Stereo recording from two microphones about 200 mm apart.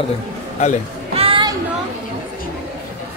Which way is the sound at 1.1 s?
25° right (ahead or behind).